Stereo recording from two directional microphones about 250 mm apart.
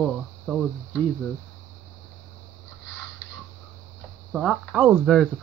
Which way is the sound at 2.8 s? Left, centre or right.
Left.